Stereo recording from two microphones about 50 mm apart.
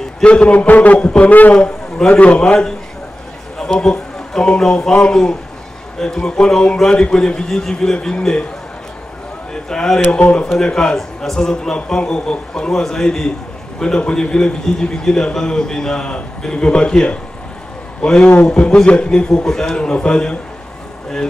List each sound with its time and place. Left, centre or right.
0.2 s a man's voice: left
1.6 s a man's voice: centre
2.1 s a man's voice: left
2.4 s a man's voice: centre
5.9 s a man's voice: centre
9.5 s speech: centre
10.1 s a man's voice: left